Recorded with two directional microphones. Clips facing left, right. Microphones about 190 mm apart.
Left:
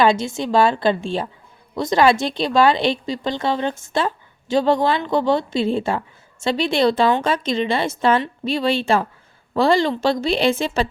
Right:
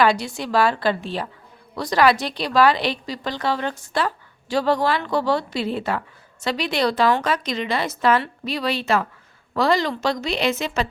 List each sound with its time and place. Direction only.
0.0 s a woman's voice: 25° left (ahead or behind)